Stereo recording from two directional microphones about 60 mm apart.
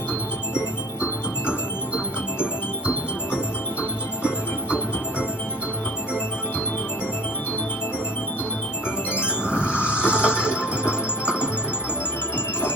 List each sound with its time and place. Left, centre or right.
2.8 s music: right
9.4 s music: centre
9.9 s music: left
10.2 s music: centre